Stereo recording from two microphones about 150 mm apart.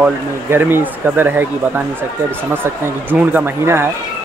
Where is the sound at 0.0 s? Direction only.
15° right (ahead or behind).